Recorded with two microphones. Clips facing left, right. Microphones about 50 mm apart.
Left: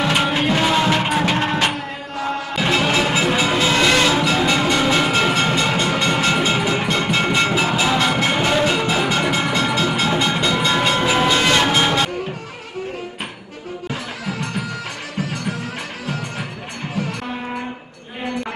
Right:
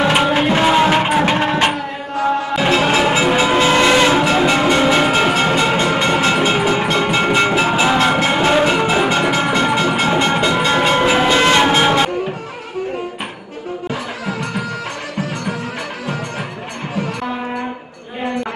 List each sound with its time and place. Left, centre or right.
0.2 s music: centre
4.1 s music: right
6.0 s music: centre
6.9 s music: centre
8.1 s music: centre; by 10.1 s right
10.5 s train: right
11.4 s music: centre